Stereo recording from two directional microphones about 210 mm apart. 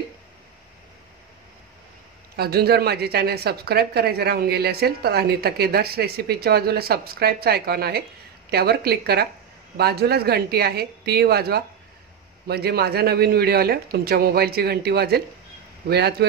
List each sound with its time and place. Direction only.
2.3 s a woman's voice: 50° right (ahead or behind)